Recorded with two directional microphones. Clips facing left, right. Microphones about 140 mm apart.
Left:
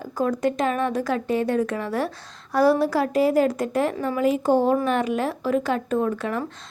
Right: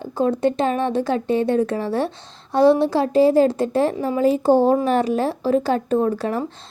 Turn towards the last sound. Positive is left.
turn(degrees=-35)  # may be behind; listen again after turning